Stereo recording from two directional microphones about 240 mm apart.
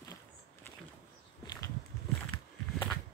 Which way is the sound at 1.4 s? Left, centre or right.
Centre.